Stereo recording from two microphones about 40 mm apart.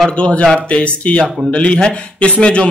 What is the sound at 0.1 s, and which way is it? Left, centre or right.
A man's voice, left.